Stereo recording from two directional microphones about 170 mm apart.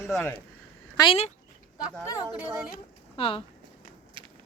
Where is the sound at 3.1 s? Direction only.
30° left (ahead or behind).